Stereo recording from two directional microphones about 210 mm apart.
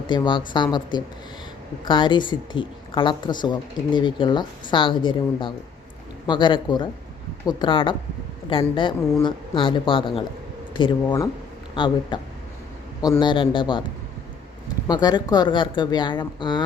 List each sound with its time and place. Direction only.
0.1 s a woman's voice: 20° left (ahead or behind)
1.8 s a woman's voice: 20° left (ahead or behind)
14.8 s a woman's voice: 20° left (ahead or behind)